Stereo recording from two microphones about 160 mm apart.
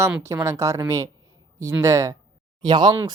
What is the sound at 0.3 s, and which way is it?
Speech, 20° right (ahead or behind).